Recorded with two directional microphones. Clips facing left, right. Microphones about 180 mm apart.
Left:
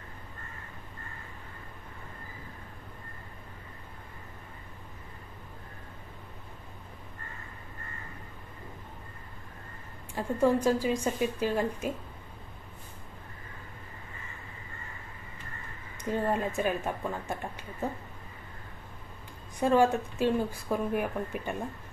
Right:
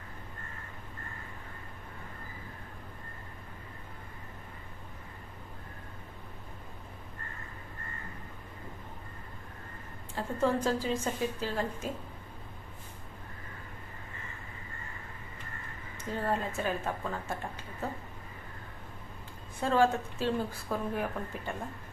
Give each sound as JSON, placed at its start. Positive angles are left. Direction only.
{"t": 10.1, "sound": "speech", "side_deg": 15}
{"t": 16.0, "sound": "speech", "side_deg": 15}
{"t": 19.6, "sound": "speech", "side_deg": 15}